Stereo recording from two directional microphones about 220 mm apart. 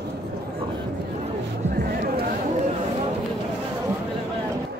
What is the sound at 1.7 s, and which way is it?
Music, 45° right (ahead or behind).